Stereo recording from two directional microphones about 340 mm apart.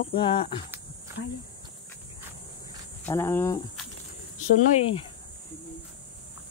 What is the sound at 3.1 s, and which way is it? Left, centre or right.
Speech, centre.